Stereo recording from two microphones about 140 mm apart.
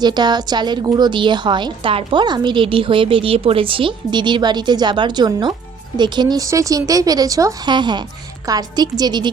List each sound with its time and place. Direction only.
0.0 s a woman's voice: 30° right (ahead or behind)